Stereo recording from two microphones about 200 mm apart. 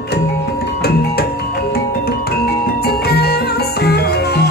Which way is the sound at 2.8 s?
50° left (ahead or behind).